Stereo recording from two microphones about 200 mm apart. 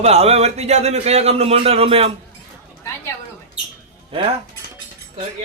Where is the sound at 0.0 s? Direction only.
30° right (ahead or behind).